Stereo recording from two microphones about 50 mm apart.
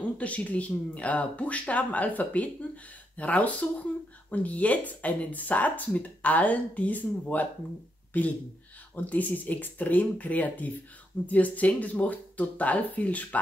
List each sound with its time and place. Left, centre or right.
0.2 s speech: left